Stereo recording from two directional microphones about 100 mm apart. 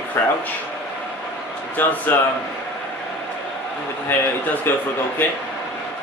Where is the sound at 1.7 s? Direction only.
20° left (ahead or behind).